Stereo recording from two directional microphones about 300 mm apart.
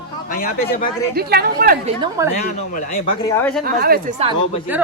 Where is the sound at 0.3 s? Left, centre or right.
Left.